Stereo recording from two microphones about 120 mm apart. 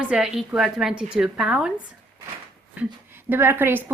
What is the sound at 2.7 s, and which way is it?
Speech, 15° right (ahead or behind).